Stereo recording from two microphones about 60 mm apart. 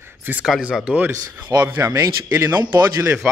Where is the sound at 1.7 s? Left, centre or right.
Right.